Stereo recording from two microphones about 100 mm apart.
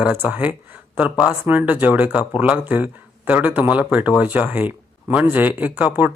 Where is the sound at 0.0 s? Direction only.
15° right (ahead or behind).